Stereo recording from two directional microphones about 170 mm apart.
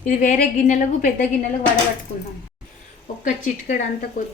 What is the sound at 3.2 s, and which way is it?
A woman's voice, 50° left (ahead or behind).